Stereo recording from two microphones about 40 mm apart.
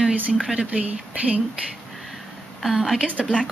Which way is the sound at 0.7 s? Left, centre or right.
Right.